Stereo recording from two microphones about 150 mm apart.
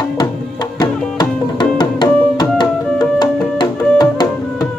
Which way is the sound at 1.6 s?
30° left (ahead or behind).